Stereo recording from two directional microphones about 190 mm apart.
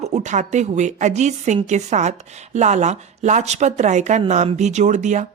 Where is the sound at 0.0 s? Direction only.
35° right (ahead or behind).